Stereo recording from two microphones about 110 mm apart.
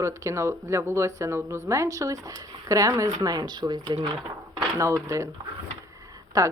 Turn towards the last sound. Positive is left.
turn(degrees=-30)  # may be behind; listen again after turning